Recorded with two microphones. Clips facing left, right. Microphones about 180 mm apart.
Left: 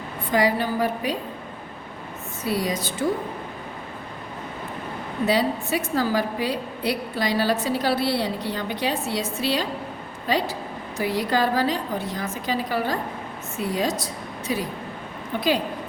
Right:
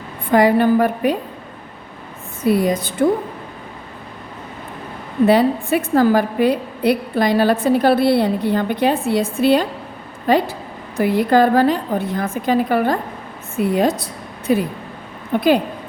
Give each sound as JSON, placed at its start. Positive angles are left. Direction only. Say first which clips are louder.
{"t": 0.3, "sound": "a woman's voice", "louder": "right 9 dB", "side_deg": -55}
{"t": 2.4, "sound": "a woman's voice", "louder": "right 9 dB", "side_deg": -55}
{"t": 5.2, "sound": "a woman's voice", "louder": "right 8 dB", "side_deg": -55}